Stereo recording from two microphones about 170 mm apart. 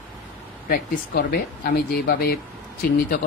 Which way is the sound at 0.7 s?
65° left (ahead or behind).